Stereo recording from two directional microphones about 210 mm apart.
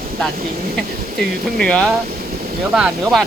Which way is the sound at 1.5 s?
5° left (ahead or behind).